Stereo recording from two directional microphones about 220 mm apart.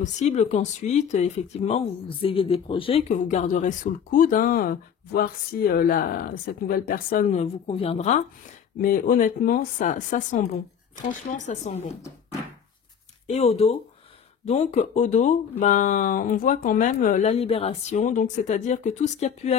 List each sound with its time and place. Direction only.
0.0 s speech: 30° left (ahead or behind)
13.3 s speech: 30° left (ahead or behind)